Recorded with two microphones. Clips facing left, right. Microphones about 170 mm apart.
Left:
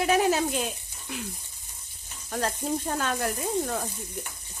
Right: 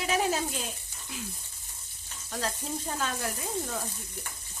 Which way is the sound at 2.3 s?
55° left (ahead or behind).